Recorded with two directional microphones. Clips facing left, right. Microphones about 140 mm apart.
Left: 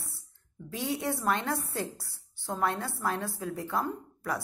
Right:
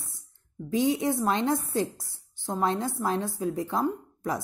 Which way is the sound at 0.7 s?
15° right (ahead or behind).